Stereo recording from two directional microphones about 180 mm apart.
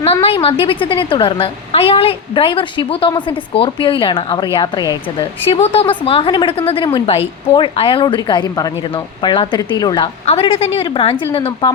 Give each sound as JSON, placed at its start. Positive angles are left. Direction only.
{"t": 0.0, "sound": "a woman's voice", "side_deg": 35}